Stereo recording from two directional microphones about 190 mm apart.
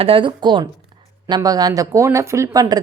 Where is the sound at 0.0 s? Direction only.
25° right (ahead or behind).